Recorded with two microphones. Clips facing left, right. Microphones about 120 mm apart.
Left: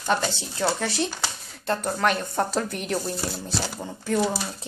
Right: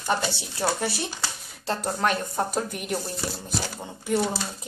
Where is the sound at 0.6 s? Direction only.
25° right (ahead or behind).